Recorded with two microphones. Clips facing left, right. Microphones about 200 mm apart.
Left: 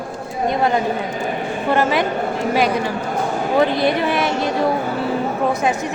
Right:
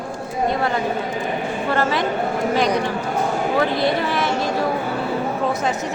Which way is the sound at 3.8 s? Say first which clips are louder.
Left 2 dB; 15° left (ahead or behind).